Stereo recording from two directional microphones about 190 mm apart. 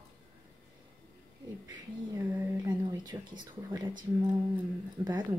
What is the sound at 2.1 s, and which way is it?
Speech, 20° right (ahead or behind).